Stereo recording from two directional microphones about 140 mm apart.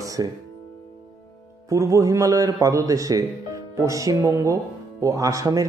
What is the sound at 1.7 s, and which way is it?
Speech, 25° right (ahead or behind).